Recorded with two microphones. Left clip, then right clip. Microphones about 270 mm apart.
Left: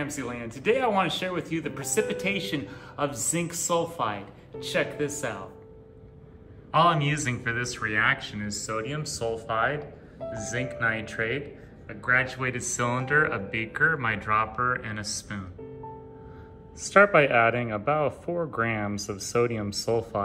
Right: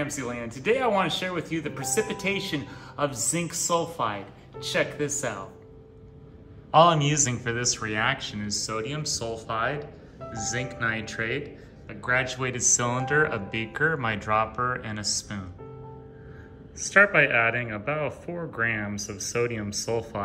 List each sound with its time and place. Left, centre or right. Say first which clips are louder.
0.0 s speech: right 2 dB; centre
6.7 s speech: right 3 dB; centre
17.0 s speech: left 1 dB; centre
19.8 s speech: left 2 dB; left